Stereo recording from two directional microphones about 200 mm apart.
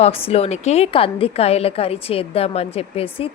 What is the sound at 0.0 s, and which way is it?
A woman's voice, 30° left (ahead or behind).